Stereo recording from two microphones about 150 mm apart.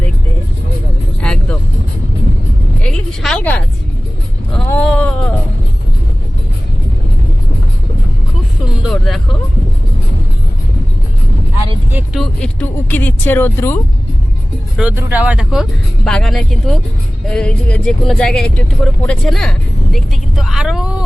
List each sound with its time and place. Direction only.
1.2 s vehicle: 5° left (ahead or behind)
2.8 s speech: 5° left (ahead or behind)
4.7 s a sound: 10° left (ahead or behind)
8.8 s music: centre (ahead or behind)
12.1 s speech: 5° left (ahead or behind)
14.8 s speech: 10° right (ahead or behind)
16.0 s speech: 5° left (ahead or behind)